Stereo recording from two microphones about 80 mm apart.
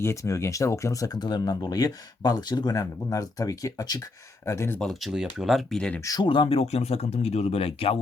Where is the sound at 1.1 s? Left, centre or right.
Left.